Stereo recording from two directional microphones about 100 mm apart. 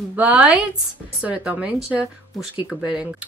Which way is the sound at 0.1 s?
15° right (ahead or behind).